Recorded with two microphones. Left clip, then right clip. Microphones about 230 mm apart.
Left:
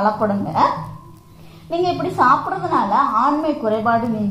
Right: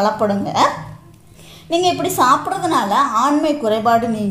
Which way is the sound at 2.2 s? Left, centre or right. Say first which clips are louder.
Even; right.